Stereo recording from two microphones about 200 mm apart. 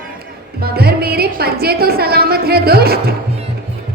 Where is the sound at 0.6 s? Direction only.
50° right (ahead or behind).